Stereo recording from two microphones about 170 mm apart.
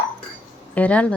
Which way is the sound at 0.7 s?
10° left (ahead or behind).